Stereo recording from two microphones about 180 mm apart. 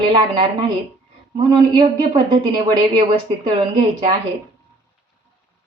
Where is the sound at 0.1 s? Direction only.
30° right (ahead or behind).